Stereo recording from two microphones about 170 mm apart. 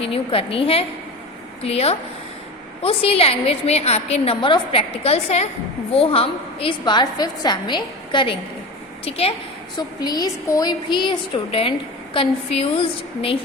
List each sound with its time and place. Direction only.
0.0 s a woman's voice: 35° left (ahead or behind)
9.7 s a woman's voice: 25° left (ahead or behind)